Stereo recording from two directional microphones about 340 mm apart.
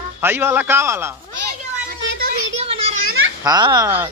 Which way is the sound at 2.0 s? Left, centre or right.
Right.